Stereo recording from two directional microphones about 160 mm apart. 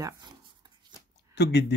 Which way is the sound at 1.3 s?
90° left.